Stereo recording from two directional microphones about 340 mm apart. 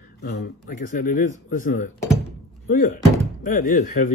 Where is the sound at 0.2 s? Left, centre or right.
Left.